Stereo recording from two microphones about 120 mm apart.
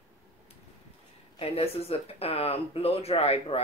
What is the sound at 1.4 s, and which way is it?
Speech, 60° left (ahead or behind).